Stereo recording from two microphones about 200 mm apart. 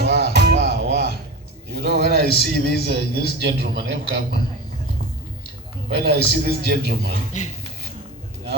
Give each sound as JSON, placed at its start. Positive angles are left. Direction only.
{"t": 0.0, "sound": "music", "side_deg": -55}
{"t": 1.7, "sound": "a sound", "side_deg": -55}
{"t": 2.4, "sound": "a man's voice", "side_deg": -55}
{"t": 5.9, "sound": "a man's voice", "side_deg": -55}
{"t": 7.3, "sound": "a man's voice", "side_deg": 35}